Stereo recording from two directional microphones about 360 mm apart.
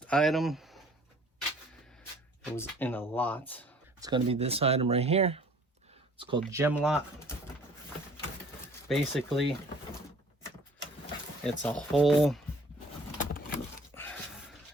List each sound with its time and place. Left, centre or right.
0.1 s speech: centre
2.4 s speech: centre
4.0 s speech: centre
8.9 s speech: centre
11.4 s speech: centre
13.1 s vehicle: left
13.9 s a sound: centre